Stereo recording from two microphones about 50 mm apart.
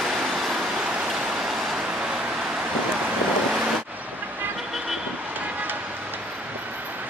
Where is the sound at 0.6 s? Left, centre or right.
Centre.